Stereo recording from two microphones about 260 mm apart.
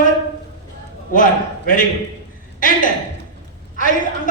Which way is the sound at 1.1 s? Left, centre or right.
Left.